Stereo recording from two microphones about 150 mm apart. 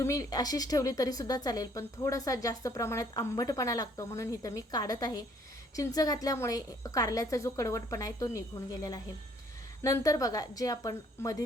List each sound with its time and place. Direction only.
0.0 s speech: 20° left (ahead or behind)